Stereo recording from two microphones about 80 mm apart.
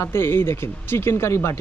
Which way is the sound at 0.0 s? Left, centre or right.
Left.